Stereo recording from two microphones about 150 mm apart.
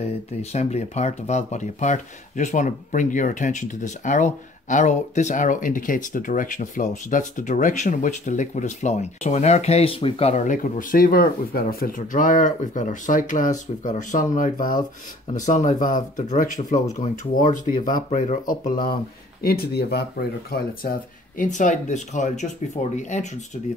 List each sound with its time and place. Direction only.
0.4 s speech: 45° left (ahead or behind)
10.4 s speech: 60° left (ahead or behind)
19.4 s speech: 90° left; by 23.6 s 50° left (ahead or behind)